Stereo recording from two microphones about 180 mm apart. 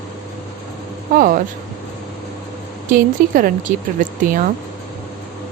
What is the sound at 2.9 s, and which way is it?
Speech, 50° right (ahead or behind).